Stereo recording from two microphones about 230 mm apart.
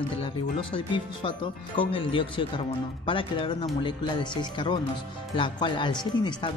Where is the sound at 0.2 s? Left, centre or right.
Left.